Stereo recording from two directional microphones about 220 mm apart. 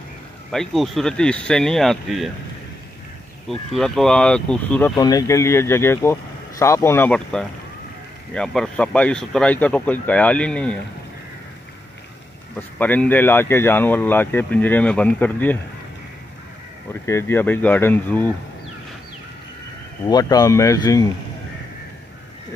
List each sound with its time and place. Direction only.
0.5 s speech: centre (ahead or behind)
3.4 s speech: centre (ahead or behind)
4.9 s speech: 15° left (ahead or behind)
12.5 s speech: 5° left (ahead or behind)
17.0 s speech: 10° left (ahead or behind)
20.1 s speech: 15° left (ahead or behind)